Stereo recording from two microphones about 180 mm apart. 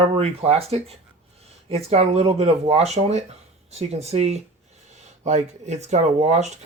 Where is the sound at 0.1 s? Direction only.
35° right (ahead or behind).